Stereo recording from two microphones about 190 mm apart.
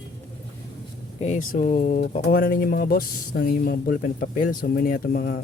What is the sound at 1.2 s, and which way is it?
Speech, 40° left (ahead or behind).